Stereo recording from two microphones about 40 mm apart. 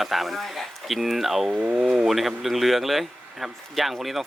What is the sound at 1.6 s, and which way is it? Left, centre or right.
Speech, right.